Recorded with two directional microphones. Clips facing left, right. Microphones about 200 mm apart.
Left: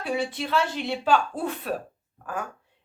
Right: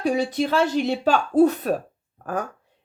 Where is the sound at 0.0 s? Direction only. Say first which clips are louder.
Right 6 dB; 40° right (ahead or behind).